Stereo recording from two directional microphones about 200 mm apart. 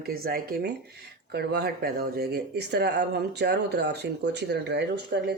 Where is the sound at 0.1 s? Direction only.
50° right (ahead or behind).